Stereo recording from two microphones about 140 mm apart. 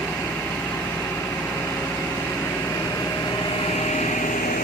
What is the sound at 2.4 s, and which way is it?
Vehicle, 20° left (ahead or behind).